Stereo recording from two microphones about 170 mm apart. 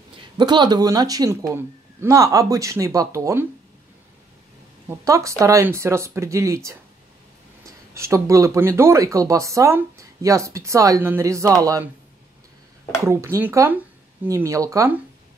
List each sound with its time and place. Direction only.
0.4 s speech: 25° right (ahead or behind)
4.8 s speech: 20° right (ahead or behind)
7.9 s speech: 15° right (ahead or behind)
13.0 s speech: 15° right (ahead or behind)